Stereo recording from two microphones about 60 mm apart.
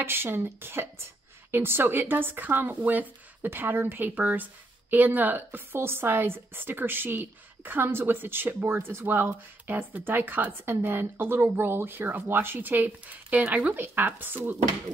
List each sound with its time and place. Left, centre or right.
0.0 s a woman's voice: right